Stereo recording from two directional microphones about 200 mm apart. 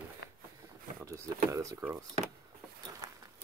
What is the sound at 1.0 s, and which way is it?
Speech, 15° right (ahead or behind).